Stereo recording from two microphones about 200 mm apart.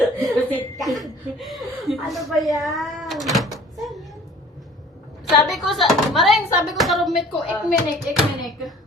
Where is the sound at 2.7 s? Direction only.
Centre (ahead or behind).